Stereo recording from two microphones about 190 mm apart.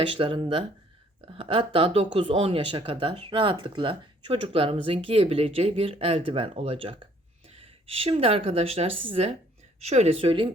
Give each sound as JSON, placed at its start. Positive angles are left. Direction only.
{"t": 0.0, "sound": "speech", "side_deg": -30}